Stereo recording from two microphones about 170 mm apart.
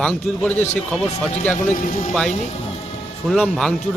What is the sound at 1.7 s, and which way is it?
Speech, 45° left (ahead or behind).